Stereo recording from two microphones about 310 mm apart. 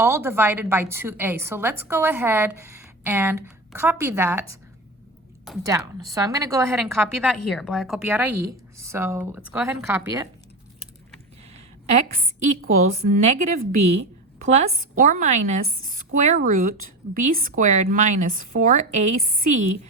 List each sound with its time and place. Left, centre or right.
0.0 s a woman's voice: centre
13.1 s a woman's voice: right